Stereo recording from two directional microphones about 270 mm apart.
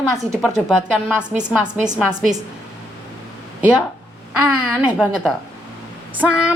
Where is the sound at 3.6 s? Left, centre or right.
Centre.